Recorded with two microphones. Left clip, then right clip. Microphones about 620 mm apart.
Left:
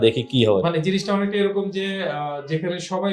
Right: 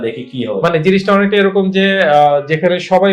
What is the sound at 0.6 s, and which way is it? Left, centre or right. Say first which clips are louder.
Speech: right 10 dB; right.